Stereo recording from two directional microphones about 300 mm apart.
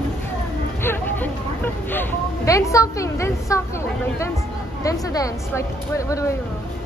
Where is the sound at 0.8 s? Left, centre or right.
Centre.